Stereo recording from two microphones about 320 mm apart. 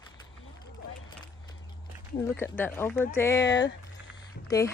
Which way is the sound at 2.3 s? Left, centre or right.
Centre.